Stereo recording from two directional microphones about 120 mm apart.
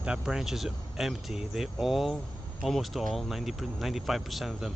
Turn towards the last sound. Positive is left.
turn(degrees=0)  # may be behind; listen again after turning